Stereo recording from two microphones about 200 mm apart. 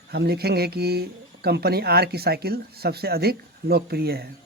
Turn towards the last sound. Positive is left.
turn(degrees=-50)  # may be behind; listen again after turning